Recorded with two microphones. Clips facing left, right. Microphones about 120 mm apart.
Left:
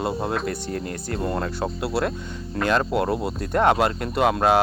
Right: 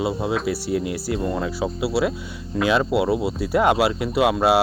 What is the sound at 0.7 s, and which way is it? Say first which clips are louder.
Speech: right 6 dB; 50° left (ahead or behind).